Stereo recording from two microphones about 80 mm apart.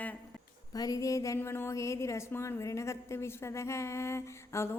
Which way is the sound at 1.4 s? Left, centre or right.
Left.